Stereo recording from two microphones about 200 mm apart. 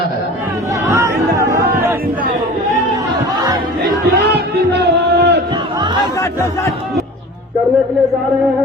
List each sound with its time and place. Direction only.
0.9 s chatter: 15° right (ahead or behind)
4.0 s music: 55° right (ahead or behind)
6.1 s chatter: 15° left (ahead or behind)